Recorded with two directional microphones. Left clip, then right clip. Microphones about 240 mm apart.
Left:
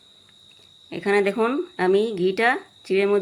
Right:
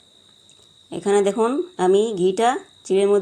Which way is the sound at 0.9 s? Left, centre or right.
Centre.